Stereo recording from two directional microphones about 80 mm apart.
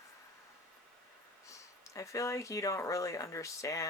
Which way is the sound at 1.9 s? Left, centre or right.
Left.